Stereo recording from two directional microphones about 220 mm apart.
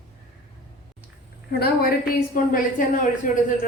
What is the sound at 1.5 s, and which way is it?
A woman's voice, 45° left (ahead or behind).